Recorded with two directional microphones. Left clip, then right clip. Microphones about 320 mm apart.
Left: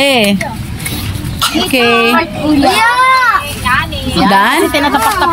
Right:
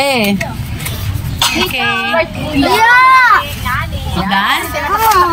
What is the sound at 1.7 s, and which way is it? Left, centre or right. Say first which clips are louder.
Speech: left 5 dB; centre.